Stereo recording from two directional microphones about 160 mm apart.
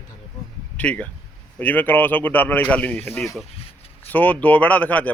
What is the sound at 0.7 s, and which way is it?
Speech, 10° left (ahead or behind).